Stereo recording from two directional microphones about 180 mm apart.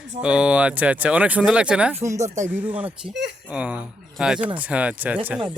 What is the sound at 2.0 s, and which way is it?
A man's voice, 15° right (ahead or behind).